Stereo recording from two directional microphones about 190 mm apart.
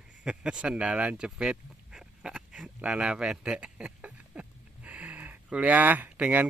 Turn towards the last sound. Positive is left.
turn(degrees=-10)  # may be behind; listen again after turning